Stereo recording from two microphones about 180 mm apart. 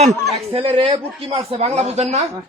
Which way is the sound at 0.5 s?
30° right (ahead or behind).